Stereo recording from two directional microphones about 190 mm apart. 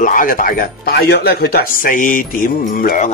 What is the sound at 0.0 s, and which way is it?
Speech, 45° left (ahead or behind).